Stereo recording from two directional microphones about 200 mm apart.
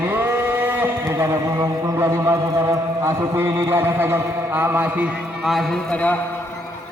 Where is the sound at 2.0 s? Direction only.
15° right (ahead or behind).